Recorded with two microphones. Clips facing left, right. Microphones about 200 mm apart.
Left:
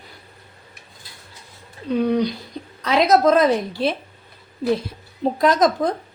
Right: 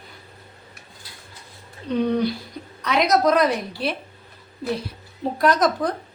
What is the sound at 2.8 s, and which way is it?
Speech, 30° left (ahead or behind).